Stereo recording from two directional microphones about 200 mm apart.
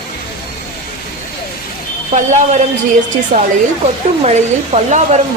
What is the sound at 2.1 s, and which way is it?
Speech, 35° right (ahead or behind).